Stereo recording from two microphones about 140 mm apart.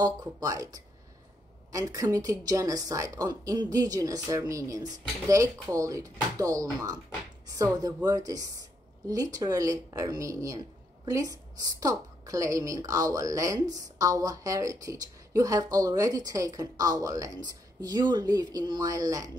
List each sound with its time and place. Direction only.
0.0 s speech: 25° right (ahead or behind)